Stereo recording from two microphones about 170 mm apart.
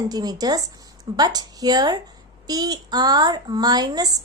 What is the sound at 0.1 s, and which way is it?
Speech, 25° right (ahead or behind).